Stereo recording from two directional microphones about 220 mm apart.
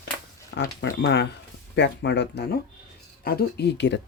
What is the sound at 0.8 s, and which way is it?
Speech, 55° left (ahead or behind).